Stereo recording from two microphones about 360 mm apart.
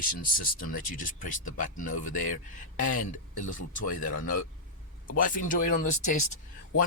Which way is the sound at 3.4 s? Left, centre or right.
Left.